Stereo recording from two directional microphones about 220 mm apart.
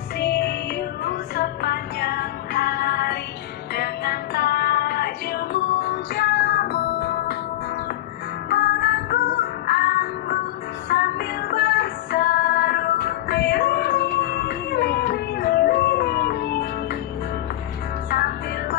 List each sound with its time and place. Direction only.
0.2 s music: 45° left (ahead or behind)
8.4 s music: 45° left (ahead or behind)
18.1 s music: 45° left (ahead or behind)